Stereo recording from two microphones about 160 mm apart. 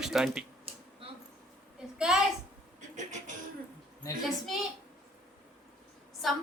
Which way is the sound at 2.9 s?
50° right (ahead or behind).